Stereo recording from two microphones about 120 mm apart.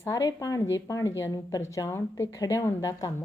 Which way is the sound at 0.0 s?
25° left (ahead or behind).